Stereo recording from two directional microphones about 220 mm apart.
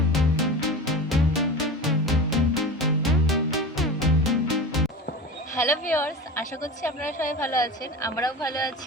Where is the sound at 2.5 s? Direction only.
Centre (ahead or behind).